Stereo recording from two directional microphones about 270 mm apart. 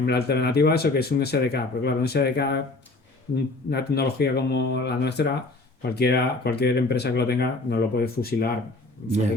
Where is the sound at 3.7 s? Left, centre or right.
Left.